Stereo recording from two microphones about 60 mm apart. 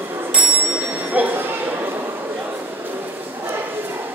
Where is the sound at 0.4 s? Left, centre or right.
Right.